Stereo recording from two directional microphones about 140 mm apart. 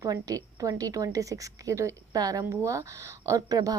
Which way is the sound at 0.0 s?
25° right (ahead or behind).